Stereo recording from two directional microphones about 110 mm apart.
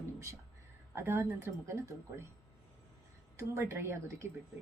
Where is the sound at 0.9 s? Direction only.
25° right (ahead or behind).